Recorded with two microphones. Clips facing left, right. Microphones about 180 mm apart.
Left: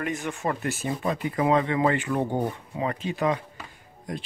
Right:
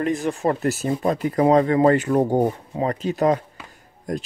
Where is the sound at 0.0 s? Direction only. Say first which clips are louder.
Right 7 dB; 35° right (ahead or behind).